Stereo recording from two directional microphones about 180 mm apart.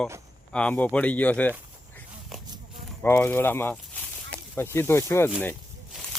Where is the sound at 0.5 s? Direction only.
5° left (ahead or behind).